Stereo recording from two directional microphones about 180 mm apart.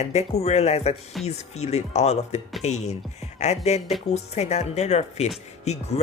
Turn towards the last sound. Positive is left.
turn(degrees=40)  # may be behind; listen again after turning